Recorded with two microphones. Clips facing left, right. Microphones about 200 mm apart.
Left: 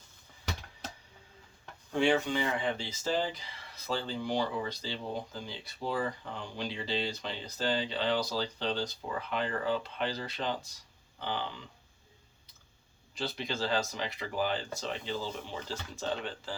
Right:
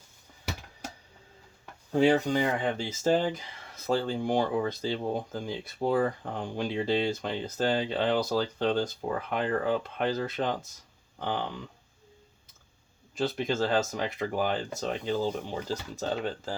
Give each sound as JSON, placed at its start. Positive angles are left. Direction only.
{"t": 1.9, "sound": "speech", "side_deg": -40}
{"t": 13.1, "sound": "speech", "side_deg": -45}